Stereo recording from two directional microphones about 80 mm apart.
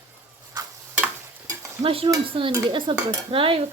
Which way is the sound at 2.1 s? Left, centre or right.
Right.